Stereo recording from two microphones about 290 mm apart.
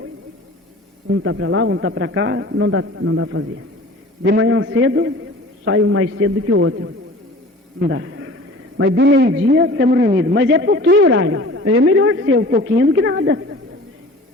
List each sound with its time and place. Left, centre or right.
1.1 s a man's voice: right